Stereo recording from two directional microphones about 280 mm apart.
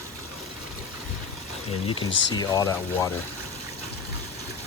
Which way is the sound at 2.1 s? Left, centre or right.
Left.